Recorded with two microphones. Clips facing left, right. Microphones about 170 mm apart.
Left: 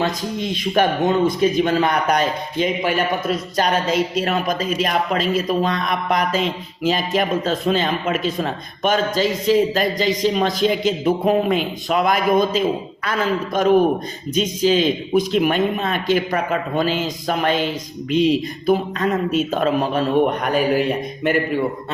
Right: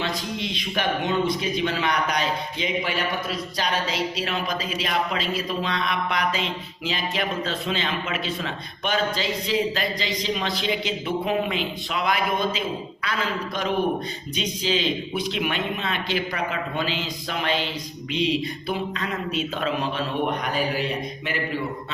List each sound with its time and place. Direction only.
0.0 s a man's voice: 45° left (ahead or behind)